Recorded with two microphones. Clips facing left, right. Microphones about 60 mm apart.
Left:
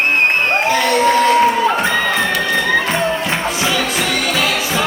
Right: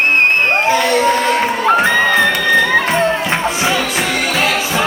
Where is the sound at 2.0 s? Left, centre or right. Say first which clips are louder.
Right 4 dB; centre.